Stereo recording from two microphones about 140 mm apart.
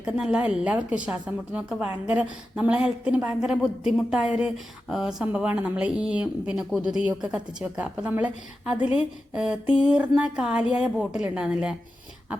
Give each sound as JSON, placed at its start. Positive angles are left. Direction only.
{"t": 0.0, "sound": "a woman's voice", "side_deg": -5}